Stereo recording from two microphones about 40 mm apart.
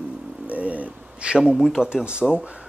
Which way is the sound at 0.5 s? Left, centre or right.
Right.